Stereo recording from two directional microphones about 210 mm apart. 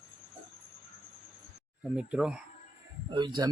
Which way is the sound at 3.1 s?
20° right (ahead or behind).